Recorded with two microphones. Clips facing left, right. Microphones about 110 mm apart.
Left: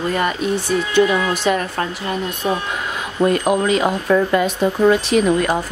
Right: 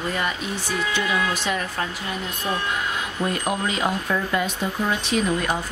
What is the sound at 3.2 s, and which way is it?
Speech, 70° left (ahead or behind).